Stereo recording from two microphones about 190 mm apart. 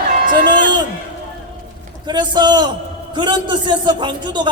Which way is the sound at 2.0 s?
25° right (ahead or behind).